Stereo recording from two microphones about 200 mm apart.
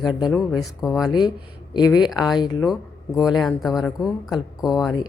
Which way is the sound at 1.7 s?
20° left (ahead or behind).